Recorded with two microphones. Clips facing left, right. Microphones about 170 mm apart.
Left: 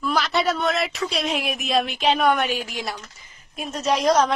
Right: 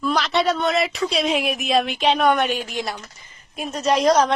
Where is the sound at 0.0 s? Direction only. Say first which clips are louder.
Right 2 dB; centre (ahead or behind).